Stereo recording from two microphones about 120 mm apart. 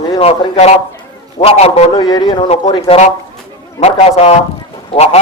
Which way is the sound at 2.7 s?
55° left (ahead or behind).